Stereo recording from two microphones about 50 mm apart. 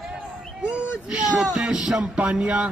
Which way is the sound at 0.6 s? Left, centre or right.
Right.